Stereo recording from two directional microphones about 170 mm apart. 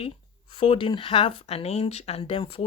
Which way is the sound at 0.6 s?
30° left (ahead or behind).